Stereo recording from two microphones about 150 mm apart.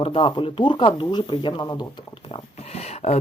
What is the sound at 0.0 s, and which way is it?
Speech, 35° left (ahead or behind).